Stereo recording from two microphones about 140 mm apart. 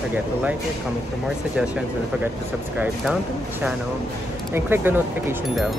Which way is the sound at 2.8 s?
5° right (ahead or behind).